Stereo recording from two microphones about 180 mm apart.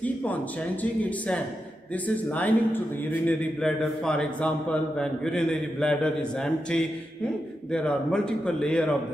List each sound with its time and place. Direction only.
0.0 s speech: 10° left (ahead or behind)
2.0 s a man's voice: 10° left (ahead or behind)